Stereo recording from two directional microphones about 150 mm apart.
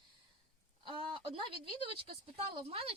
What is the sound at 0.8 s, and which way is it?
Speech, 35° right (ahead or behind).